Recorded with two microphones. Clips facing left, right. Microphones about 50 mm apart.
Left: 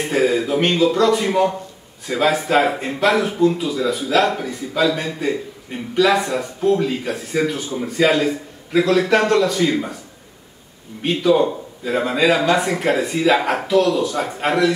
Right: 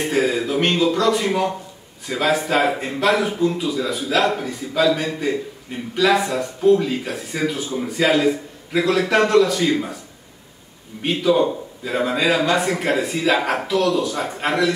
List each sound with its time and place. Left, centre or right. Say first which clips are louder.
0.0 s a man's voice: left 2 dB; centre
11.0 s a man's voice: left 2 dB; centre